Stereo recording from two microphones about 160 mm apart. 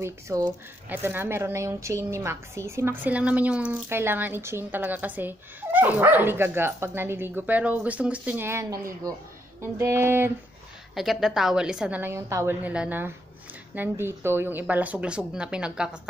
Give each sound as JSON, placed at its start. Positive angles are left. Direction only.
{"t": 0.0, "sound": "a woman's voice", "side_deg": -20}
{"t": 11.0, "sound": "a woman's voice", "side_deg": 0}